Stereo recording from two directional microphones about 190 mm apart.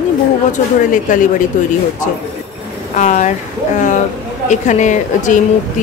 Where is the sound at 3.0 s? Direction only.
40° left (ahead or behind).